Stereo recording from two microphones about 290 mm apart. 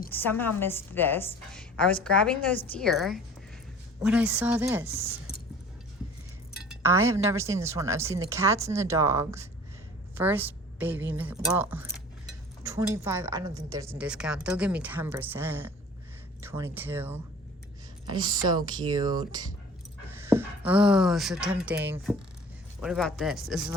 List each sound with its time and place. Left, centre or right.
0.1 s a woman's voice: centre
6.7 s speech: centre
20.1 s a sound: centre
20.7 s speech: centre